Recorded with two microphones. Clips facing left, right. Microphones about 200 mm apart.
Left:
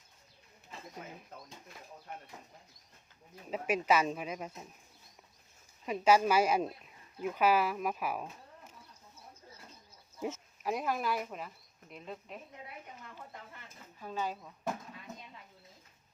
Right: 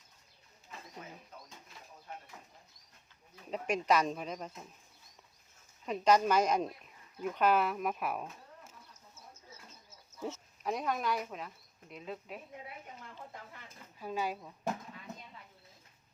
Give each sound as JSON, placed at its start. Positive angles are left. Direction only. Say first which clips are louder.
{"t": 3.5, "sound": "speech", "louder": "left 1 dB", "side_deg": 5}
{"t": 5.8, "sound": "speech", "louder": "left 1 dB", "side_deg": 5}
{"t": 8.9, "sound": "a sound", "louder": "left 1 dB", "side_deg": -45}
{"t": 10.2, "sound": "speech", "louder": "left 2 dB", "side_deg": 15}
{"t": 10.6, "sound": "speech", "louder": "left 1 dB", "side_deg": 5}
{"t": 14.0, "sound": "speech", "louder": "right 1 dB", "side_deg": -10}